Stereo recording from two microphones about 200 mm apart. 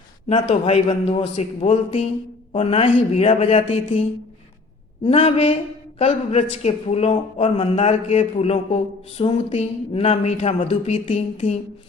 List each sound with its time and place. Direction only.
0.3 s a man's voice: 25° left (ahead or behind)
5.0 s a man's voice: 30° left (ahead or behind)